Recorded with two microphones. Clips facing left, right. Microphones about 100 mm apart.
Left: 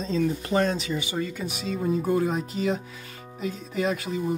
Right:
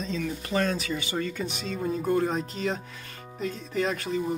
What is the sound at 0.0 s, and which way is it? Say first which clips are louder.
Speech: left 6 dB; 35° left (ahead or behind).